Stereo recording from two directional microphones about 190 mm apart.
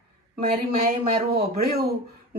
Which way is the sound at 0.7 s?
30° right (ahead or behind).